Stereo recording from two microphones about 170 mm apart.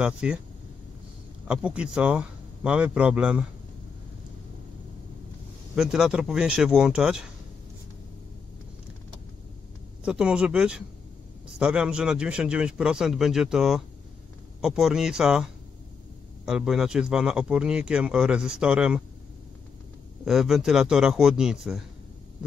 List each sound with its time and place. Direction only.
0.0 s a man's voice: 5° right (ahead or behind)
1.5 s a man's voice: 5° right (ahead or behind)
5.8 s speech: 5° right (ahead or behind)
10.0 s speech: 5° right (ahead or behind)
20.2 s speech: centre (ahead or behind)